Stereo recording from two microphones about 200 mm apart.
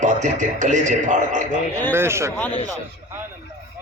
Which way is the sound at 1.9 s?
15° right (ahead or behind).